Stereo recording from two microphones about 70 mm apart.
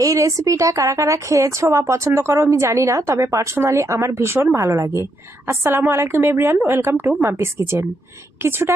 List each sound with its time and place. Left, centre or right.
0.0 s a woman's voice: right